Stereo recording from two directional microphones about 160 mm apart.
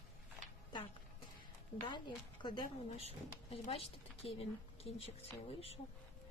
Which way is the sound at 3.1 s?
40° left (ahead or behind).